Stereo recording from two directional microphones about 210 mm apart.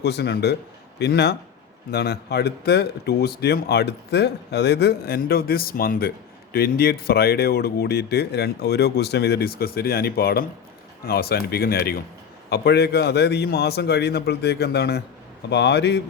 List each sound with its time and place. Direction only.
0.0 s speech: 50° left (ahead or behind)